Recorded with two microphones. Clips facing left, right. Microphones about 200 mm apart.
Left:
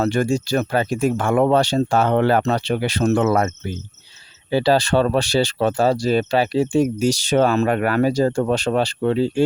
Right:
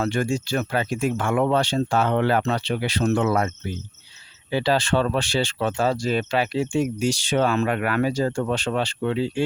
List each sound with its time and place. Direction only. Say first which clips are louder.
0.0 s speech: left 4 dB; 40° left (ahead or behind)